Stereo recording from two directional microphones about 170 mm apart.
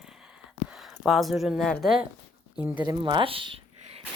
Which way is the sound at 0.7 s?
Centre (ahead or behind).